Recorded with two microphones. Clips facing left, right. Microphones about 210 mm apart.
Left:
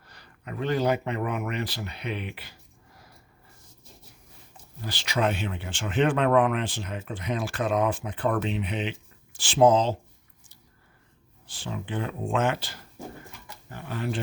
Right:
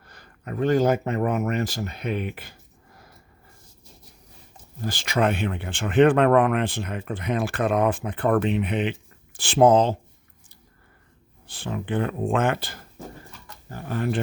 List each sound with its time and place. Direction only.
0.0 s speech: 50° right (ahead or behind)
4.8 s speech: 50° right (ahead or behind)
11.4 s speech: 60° right (ahead or behind)
13.7 s speech: 40° right (ahead or behind)